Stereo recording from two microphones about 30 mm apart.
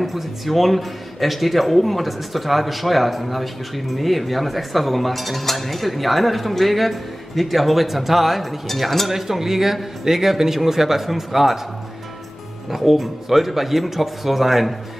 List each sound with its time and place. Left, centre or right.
0.0 s speech: centre
9.1 s speech: centre
12.7 s speech: centre